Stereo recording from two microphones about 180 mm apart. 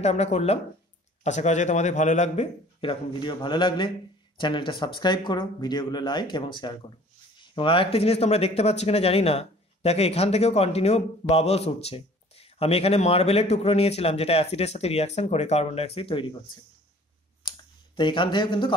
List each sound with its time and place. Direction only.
0.0 s speech: 35° left (ahead or behind)
17.4 s clicking: 25° left (ahead or behind)